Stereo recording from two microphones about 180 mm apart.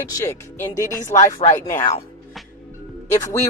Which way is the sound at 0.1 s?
15° left (ahead or behind).